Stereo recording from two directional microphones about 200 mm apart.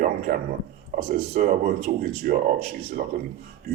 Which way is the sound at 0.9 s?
45° right (ahead or behind).